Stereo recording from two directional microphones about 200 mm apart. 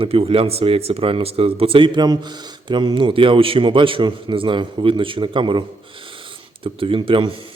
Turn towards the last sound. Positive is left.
turn(degrees=-25)  # may be behind; listen again after turning